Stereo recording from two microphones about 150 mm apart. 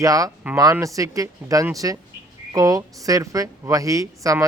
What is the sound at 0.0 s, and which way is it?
Speech, 25° right (ahead or behind).